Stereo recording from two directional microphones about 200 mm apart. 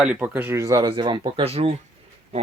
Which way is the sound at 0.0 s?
5° right (ahead or behind).